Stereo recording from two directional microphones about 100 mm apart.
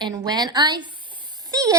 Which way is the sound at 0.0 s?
45° right (ahead or behind).